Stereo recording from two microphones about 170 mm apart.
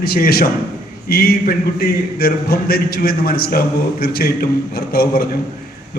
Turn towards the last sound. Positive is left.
turn(degrees=60)  # may be behind; listen again after turning